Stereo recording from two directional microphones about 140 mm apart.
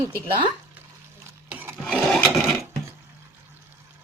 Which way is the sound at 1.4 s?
10° right (ahead or behind).